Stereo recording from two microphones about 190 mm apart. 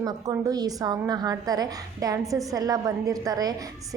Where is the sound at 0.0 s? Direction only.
20° right (ahead or behind).